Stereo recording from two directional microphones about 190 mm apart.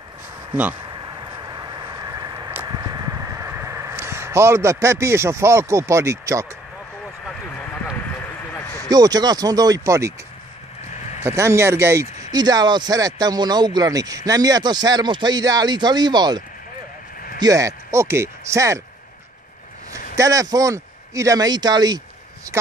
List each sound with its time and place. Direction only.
1.5 s vehicle: 20° right (ahead or behind)
8.8 s speech: 20° right (ahead or behind)
11.2 s speech: 15° right (ahead or behind)
19.9 s speech: 15° right (ahead or behind)